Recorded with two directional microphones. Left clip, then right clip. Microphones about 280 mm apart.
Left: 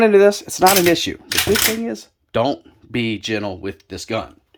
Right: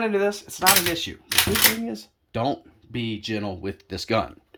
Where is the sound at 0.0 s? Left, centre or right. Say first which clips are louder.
Left 11 dB; centre.